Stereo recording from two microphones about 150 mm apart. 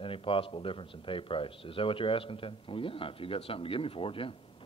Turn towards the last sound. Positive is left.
turn(degrees=35)  # may be behind; listen again after turning